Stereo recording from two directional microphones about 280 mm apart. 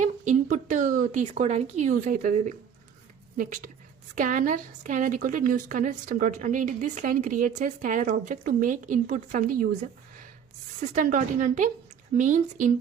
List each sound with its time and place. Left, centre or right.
0.0 s a woman's voice: right
10.8 s a woman's voice: right